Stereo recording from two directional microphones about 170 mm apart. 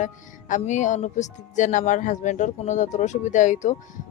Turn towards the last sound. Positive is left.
turn(degrees=45)  # may be behind; listen again after turning